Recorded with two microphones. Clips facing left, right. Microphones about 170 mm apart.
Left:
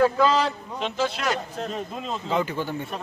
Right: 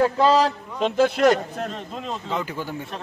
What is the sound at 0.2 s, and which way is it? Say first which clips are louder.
A man's voice: right 3 dB; 40° right (ahead or behind).